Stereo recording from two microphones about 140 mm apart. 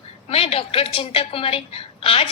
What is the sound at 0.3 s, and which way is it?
A woman's voice, 45° left (ahead or behind).